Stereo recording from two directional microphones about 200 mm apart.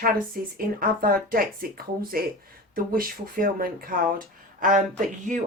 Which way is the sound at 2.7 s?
45° right (ahead or behind).